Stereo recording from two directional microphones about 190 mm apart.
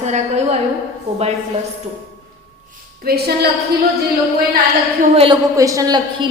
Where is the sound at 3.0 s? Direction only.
55° right (ahead or behind).